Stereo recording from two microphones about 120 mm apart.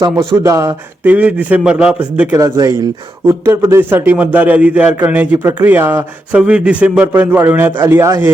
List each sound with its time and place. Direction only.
0.4 s speech: 25° right (ahead or behind)
1.0 s a man's voice: 10° right (ahead or behind)
2.3 s a man's voice: 25° right (ahead or behind)